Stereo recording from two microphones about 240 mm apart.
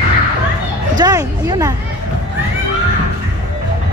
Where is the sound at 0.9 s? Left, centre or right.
Centre.